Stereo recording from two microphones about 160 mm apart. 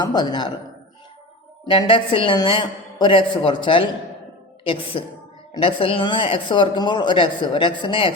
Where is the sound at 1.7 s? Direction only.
30° left (ahead or behind).